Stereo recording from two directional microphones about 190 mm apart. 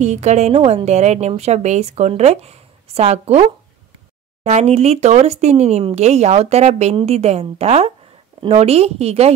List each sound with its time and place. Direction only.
0.0 s speech: 35° right (ahead or behind)